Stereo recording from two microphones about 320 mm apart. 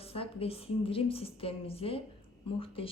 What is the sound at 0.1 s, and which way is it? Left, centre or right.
Speech, centre.